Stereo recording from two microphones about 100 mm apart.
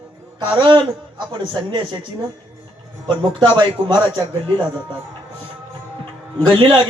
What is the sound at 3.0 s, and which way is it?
Speech, 55° right (ahead or behind).